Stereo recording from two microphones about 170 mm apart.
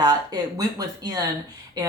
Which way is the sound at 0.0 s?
20° right (ahead or behind).